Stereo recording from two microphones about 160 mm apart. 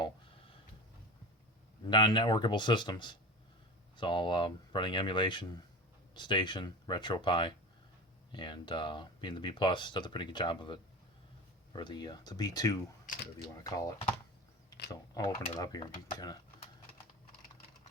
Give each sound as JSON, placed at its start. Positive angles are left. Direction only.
{"t": 1.8, "sound": "speech", "side_deg": 30}
{"t": 13.1, "sound": "speech", "side_deg": 55}
{"t": 13.5, "sound": "speech", "side_deg": 20}
{"t": 15.1, "sound": "speech", "side_deg": 25}